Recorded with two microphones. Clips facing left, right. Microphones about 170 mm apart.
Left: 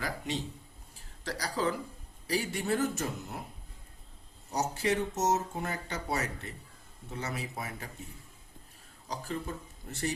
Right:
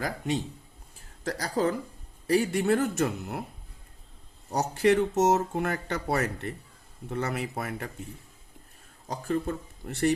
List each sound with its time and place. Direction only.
1.2 s speech: 45° right (ahead or behind); by 3.4 s 65° right (ahead or behind)
4.5 s speech: 60° right (ahead or behind)
9.0 s speech: 55° right (ahead or behind)